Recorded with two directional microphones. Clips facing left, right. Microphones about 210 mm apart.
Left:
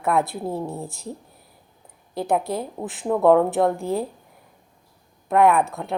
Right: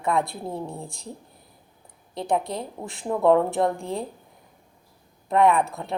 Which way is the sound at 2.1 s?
5° left (ahead or behind).